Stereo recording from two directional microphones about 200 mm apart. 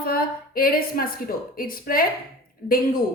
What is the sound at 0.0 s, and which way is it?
A woman's voice, 50° left (ahead or behind).